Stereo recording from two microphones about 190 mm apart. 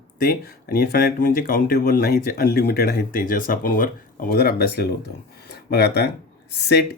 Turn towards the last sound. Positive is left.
turn(degrees=60)  # may be behind; listen again after turning